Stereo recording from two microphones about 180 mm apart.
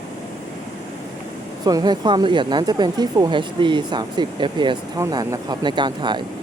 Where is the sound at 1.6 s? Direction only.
20° right (ahead or behind).